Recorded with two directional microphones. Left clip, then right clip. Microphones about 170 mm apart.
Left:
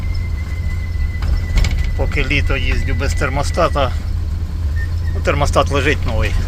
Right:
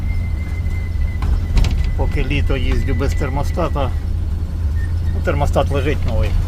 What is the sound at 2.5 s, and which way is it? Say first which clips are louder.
Speech: left 1 dB; 25° right (ahead or behind).